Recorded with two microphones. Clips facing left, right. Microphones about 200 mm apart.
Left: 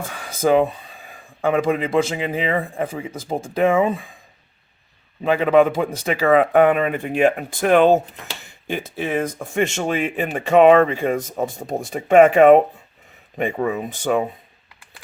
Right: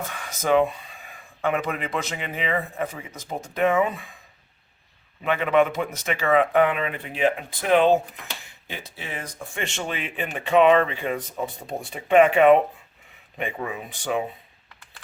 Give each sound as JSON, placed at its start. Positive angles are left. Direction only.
{"t": 0.0, "sound": "speech", "side_deg": 30}
{"t": 5.2, "sound": "speech", "side_deg": 35}